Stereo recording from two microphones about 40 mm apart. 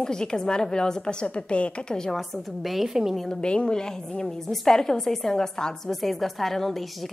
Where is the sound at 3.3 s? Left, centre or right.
Left.